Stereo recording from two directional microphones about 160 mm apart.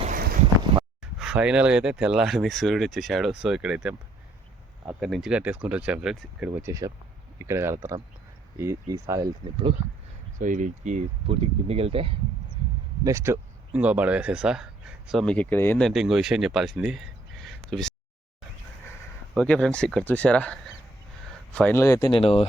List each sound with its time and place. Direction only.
0.1 s a sound: 65° right (ahead or behind)
0.7 s a sound: 35° right (ahead or behind)
1.2 s speech: 5° right (ahead or behind)
4.9 s speech: centre (ahead or behind); by 9.2 s 20° right (ahead or behind)
10.3 s speech: 55° right (ahead or behind)
11.3 s speech: 40° right (ahead or behind)
13.1 s speech: 20° right (ahead or behind); by 15.9 s 15° left (ahead or behind)
15.9 s speech: centre (ahead or behind)
17.4 s a sound: centre (ahead or behind)
19.3 s speech: 5° left (ahead or behind); by 22.2 s 25° left (ahead or behind)
22.2 s speech: 35° left (ahead or behind)